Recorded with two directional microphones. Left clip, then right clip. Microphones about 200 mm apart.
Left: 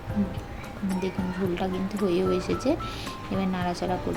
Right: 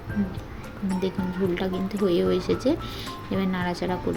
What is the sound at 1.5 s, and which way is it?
Speech, 15° right (ahead or behind).